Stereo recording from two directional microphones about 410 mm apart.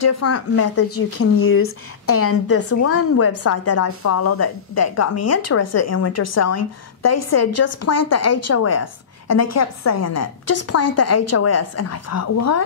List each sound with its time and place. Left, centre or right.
0.0 s speech: left